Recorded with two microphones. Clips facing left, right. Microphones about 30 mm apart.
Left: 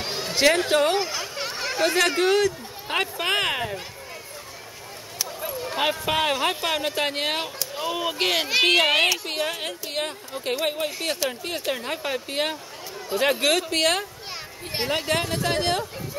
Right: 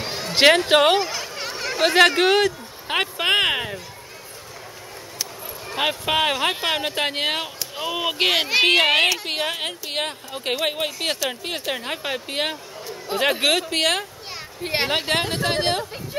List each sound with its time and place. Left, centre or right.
0.0 s a sound: centre
0.3 s a sound: right
0.7 s speech: right
0.9 s a sound: centre
2.0 s speech: right
2.9 s speech: centre
5.8 s speech: centre
9.2 s speech: right
14.6 s a woman's voice: right
15.0 s speech: right